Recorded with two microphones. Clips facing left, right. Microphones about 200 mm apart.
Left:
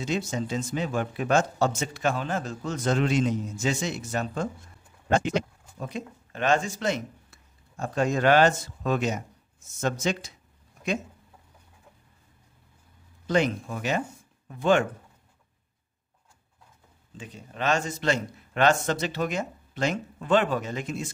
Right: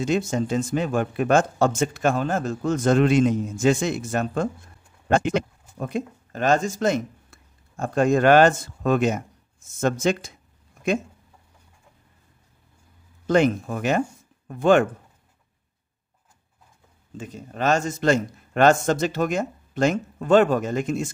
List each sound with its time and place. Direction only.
0.0 s speech: 50° right (ahead or behind)
13.3 s speech: 50° right (ahead or behind)
17.2 s speech: 45° right (ahead or behind)